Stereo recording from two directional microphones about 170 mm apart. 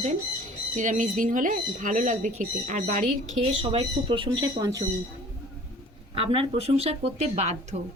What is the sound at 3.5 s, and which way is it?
Speech, 30° right (ahead or behind).